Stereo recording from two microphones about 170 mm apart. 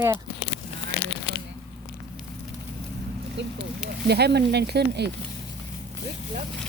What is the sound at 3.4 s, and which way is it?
Speech, 90° right.